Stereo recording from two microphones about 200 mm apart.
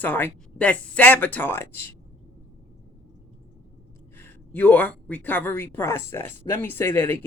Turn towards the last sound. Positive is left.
turn(degrees=10)  # may be behind; listen again after turning